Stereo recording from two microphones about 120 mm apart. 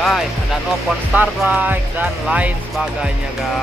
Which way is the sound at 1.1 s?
15° right (ahead or behind).